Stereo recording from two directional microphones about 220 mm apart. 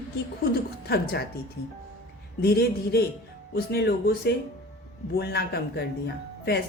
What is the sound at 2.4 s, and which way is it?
Speech, 45° left (ahead or behind).